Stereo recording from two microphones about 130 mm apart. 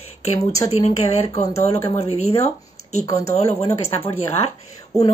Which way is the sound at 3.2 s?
55° left (ahead or behind).